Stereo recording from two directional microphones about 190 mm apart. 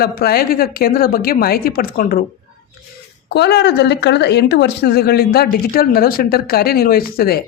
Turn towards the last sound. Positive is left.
turn(degrees=55)  # may be behind; listen again after turning